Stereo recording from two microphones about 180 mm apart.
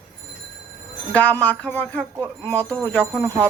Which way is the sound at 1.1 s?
10° left (ahead or behind).